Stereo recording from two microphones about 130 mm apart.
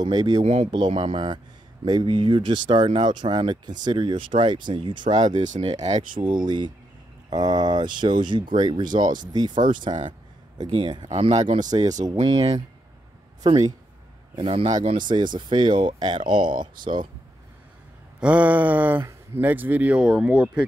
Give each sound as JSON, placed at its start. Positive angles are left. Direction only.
{"t": 0.0, "sound": "speech", "side_deg": -35}
{"t": 0.4, "sound": "speech", "side_deg": -60}
{"t": 0.9, "sound": "speech", "side_deg": -40}
{"t": 5.1, "sound": "speech", "side_deg": -65}
{"t": 5.6, "sound": "speech", "side_deg": -55}
{"t": 6.2, "sound": "speech", "side_deg": -35}
{"t": 9.6, "sound": "speech", "side_deg": -90}
{"t": 9.8, "sound": "speech", "side_deg": -35}
{"t": 11.1, "sound": "speech", "side_deg": -50}
{"t": 11.5, "sound": "speech", "side_deg": -30}
{"t": 14.3, "sound": "speech", "side_deg": -40}
{"t": 18.2, "sound": "speech", "side_deg": -10}